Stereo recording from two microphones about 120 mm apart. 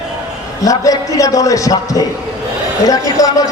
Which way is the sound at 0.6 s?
30° left (ahead or behind).